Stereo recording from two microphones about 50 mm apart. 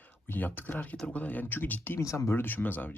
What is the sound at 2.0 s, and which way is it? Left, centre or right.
Speech, left.